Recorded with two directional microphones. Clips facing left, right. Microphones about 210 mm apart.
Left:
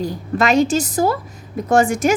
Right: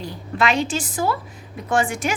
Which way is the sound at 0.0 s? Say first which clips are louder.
Left 4 dB; 45° left (ahead or behind).